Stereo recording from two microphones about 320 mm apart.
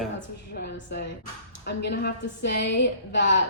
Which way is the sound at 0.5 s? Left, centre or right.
Left.